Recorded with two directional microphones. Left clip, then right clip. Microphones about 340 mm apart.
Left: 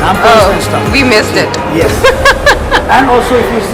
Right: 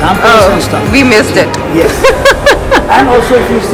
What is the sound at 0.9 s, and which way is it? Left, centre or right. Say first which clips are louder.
Speech: right 2 dB; centre.